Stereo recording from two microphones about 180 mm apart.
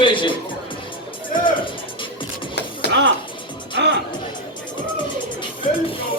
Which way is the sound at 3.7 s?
75° right (ahead or behind).